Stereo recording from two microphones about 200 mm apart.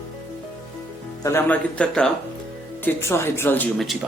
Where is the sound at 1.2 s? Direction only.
15° left (ahead or behind).